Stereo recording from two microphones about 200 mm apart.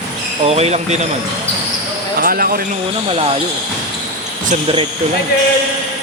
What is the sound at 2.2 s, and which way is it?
Basketball bounce, 45° right (ahead or behind).